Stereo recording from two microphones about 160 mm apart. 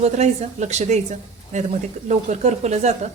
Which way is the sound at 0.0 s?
45° right (ahead or behind).